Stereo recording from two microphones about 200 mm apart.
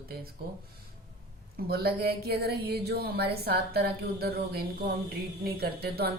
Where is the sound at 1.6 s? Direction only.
50° right (ahead or behind).